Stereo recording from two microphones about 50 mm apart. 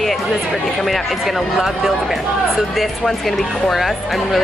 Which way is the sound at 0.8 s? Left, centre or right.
Centre.